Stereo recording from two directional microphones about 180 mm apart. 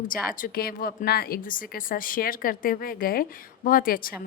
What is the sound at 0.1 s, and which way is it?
A woman's voice, 50° left (ahead or behind).